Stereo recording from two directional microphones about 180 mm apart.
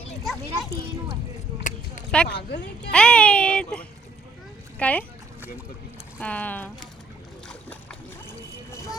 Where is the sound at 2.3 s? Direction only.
65° left (ahead or behind).